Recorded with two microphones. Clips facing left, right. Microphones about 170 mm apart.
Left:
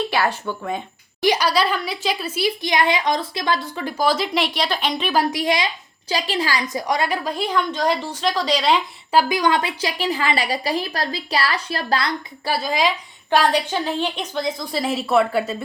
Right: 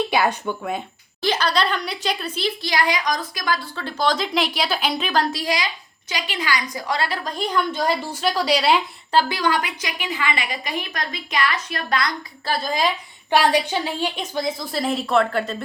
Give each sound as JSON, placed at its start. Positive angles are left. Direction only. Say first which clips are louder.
{"t": 0.1, "sound": "speech", "louder": "right 1 dB", "side_deg": -15}
{"t": 0.6, "sound": "a woman's voice", "louder": "left 3 dB", "side_deg": -5}
{"t": 1.2, "sound": "a woman's voice", "louder": "left 3 dB", "side_deg": 10}
{"t": 6.8, "sound": "a woman's voice", "louder": "left 3 dB", "side_deg": 20}
{"t": 7.3, "sound": "a woman's voice", "louder": "left 1 dB", "side_deg": 0}
{"t": 9.1, "sound": "a woman's voice", "louder": "left 2 dB", "side_deg": 20}
{"t": 12.5, "sound": "a woman's voice", "louder": "left 1 dB", "side_deg": 5}